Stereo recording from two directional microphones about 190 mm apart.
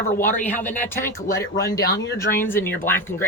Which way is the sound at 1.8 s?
55° left (ahead or behind).